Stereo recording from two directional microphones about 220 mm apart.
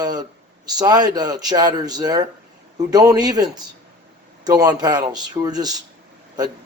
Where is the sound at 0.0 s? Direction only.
15° right (ahead or behind).